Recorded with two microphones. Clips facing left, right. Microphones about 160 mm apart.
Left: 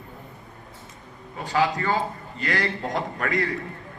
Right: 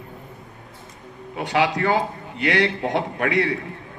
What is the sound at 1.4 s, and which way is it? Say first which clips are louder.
A man's voice: right 3 dB; 75° right (ahead or behind).